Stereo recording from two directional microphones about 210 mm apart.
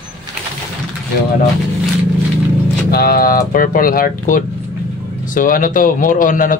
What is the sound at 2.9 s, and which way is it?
Speech, 45° left (ahead or behind).